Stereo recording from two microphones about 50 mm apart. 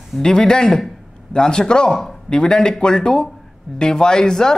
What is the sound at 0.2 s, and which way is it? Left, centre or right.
A man's voice, centre.